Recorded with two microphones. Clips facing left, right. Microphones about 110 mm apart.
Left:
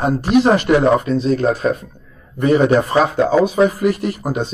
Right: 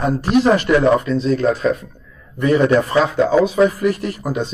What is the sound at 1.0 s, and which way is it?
Speech, 45° left (ahead or behind).